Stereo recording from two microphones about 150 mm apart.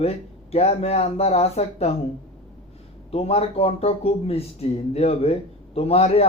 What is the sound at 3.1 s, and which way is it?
Speech, 40° left (ahead or behind).